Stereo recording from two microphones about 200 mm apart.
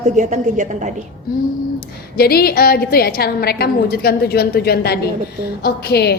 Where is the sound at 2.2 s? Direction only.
50° left (ahead or behind).